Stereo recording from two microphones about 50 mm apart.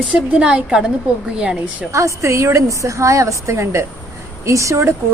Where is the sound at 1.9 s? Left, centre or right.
Right.